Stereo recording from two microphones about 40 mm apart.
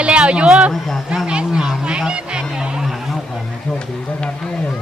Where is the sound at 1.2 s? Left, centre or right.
Right.